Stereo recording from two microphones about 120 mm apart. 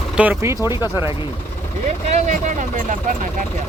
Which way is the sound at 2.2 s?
90° right.